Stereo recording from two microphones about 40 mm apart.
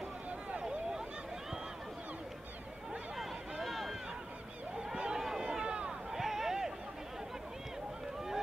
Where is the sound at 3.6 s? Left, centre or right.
Centre.